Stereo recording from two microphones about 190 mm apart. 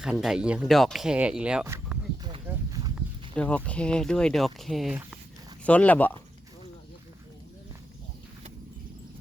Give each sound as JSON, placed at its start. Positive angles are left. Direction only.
{"t": 0.0, "sound": "speech", "side_deg": -5}
{"t": 2.6, "sound": "a sound", "side_deg": -20}
{"t": 2.9, "sound": "speech", "side_deg": 5}